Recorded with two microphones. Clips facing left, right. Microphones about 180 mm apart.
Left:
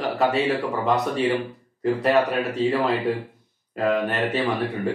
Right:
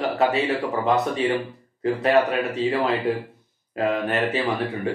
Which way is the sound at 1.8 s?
Centre (ahead or behind).